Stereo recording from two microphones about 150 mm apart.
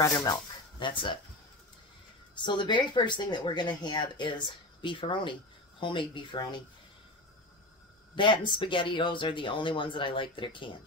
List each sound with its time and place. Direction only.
0.0 s speech: 20° left (ahead or behind)
0.7 s speech: 35° left (ahead or behind)
2.3 s speech: 30° left (ahead or behind)
8.2 s speech: 30° left (ahead or behind)